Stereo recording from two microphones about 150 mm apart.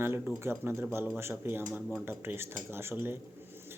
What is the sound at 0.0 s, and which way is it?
Speech, 15° right (ahead or behind).